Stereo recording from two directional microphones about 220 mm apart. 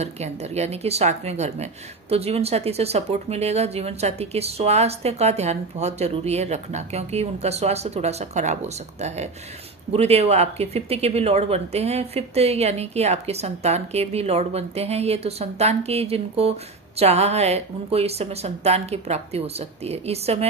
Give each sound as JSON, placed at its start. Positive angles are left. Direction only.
{"t": 0.0, "sound": "speech", "side_deg": -30}